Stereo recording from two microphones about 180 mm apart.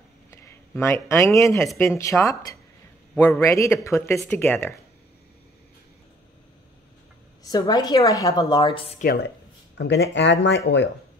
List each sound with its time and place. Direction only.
0.3 s speech: 15° left (ahead or behind)
7.4 s a woman's voice: 20° left (ahead or behind)
9.8 s speech: 75° left (ahead or behind)